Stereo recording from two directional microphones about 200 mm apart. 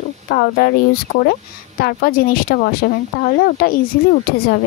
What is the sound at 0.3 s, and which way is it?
Speech, 50° left (ahead or behind).